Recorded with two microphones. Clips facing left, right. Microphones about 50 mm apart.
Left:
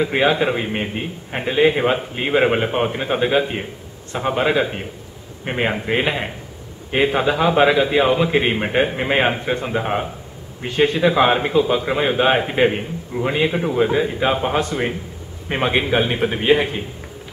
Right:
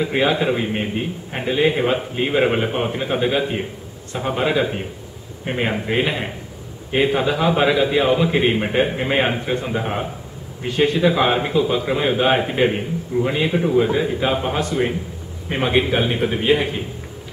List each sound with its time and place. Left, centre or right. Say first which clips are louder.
0.0 s a man's voice: left 1 dB; centre